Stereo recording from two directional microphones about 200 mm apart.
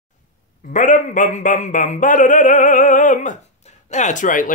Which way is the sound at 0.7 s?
40° left (ahead or behind).